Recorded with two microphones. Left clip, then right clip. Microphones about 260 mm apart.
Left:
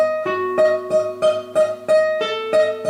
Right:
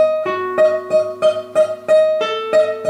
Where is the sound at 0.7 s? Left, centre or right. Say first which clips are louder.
Right 2 dB; centre.